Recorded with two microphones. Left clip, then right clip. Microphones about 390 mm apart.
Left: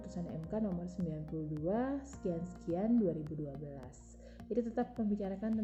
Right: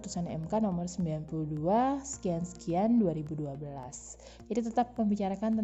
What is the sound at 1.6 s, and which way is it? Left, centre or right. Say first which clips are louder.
A woman's voice: right 9 dB; right.